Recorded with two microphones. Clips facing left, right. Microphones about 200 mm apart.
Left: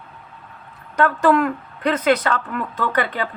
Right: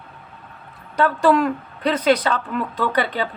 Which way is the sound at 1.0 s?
15° right (ahead or behind).